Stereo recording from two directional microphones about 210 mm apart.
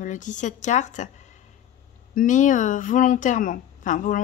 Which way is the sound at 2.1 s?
40° left (ahead or behind).